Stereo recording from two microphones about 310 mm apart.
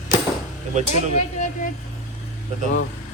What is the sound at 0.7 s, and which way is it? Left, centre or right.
Speech, right.